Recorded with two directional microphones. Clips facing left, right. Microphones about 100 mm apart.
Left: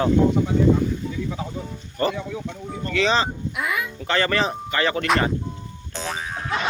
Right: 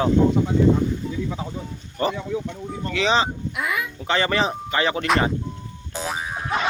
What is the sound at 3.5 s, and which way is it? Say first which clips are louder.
Speech: even; centre (ahead or behind).